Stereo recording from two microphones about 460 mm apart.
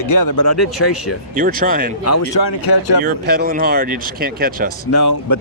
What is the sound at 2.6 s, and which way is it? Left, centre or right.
Speech, left.